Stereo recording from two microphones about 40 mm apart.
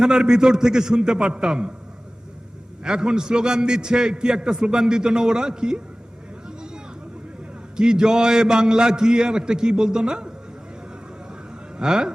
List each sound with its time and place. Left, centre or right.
0.0 s a man's voice: centre
2.8 s a man's voice: centre
7.8 s a man's voice: centre
11.8 s speech: centre